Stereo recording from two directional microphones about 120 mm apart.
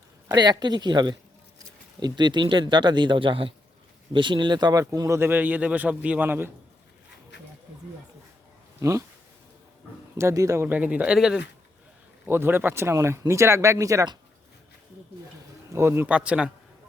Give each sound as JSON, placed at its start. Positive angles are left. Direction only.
{"t": 0.3, "sound": "speech", "side_deg": -35}
{"t": 8.8, "sound": "speech", "side_deg": -25}
{"t": 10.2, "sound": "speech", "side_deg": -25}
{"t": 12.3, "sound": "speech", "side_deg": -20}
{"t": 15.7, "sound": "speech", "side_deg": -20}
{"t": 16.1, "sound": "speech", "side_deg": -10}